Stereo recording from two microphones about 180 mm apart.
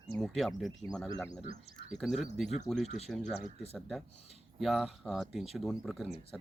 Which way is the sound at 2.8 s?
35° left (ahead or behind).